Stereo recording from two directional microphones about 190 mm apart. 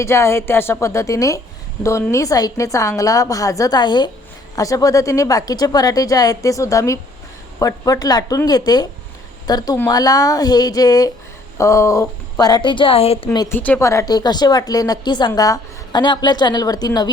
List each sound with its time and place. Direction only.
0.0 s a woman's voice: 15° left (ahead or behind); by 13.2 s 30° left (ahead or behind)
13.3 s a woman's voice: 20° left (ahead or behind)